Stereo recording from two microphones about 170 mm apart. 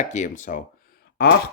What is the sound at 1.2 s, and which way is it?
Speech, 65° left (ahead or behind).